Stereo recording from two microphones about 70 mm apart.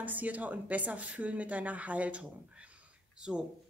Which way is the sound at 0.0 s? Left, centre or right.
Right.